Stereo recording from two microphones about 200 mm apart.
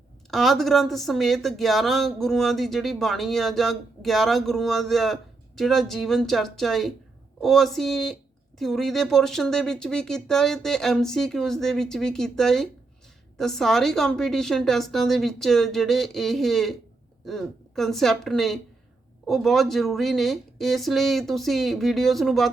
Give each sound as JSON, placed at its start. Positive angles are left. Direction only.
{"t": 0.3, "sound": "speech", "side_deg": 0}